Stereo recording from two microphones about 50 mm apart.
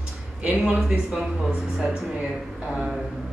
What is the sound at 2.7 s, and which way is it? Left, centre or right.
Speech, centre.